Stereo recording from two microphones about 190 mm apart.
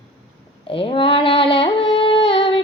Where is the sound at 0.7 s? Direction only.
30° left (ahead or behind).